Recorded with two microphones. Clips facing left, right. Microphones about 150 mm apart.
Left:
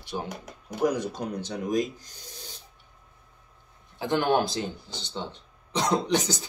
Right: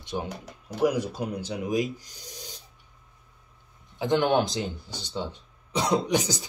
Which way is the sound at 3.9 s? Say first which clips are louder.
Right 1 dB; 20° right (ahead or behind).